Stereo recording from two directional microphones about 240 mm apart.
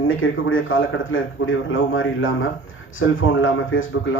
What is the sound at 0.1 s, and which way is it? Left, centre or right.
A man's voice, left.